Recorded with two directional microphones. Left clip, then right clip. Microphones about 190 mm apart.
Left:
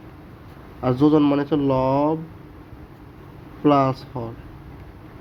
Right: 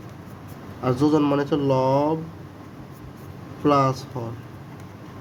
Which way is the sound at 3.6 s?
30° left (ahead or behind).